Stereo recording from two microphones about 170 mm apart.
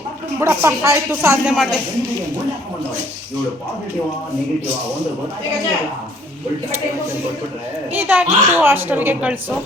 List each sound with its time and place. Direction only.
0.3 s a woman's voice: 15° right (ahead or behind)
1.5 s a woman's voice: centre (ahead or behind)
7.9 s a woman's voice: 10° right (ahead or behind)